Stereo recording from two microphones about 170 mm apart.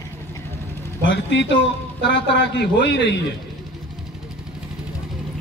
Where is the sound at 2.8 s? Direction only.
80° left.